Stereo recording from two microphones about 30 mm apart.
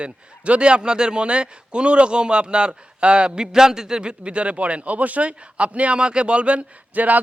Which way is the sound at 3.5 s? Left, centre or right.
Centre.